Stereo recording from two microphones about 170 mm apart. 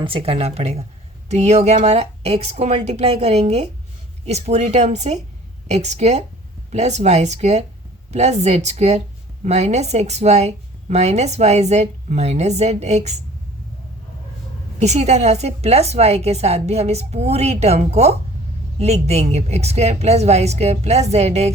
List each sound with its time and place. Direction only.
0.0 s a woman's voice: 30° right (ahead or behind)
14.8 s a woman's voice: 40° right (ahead or behind)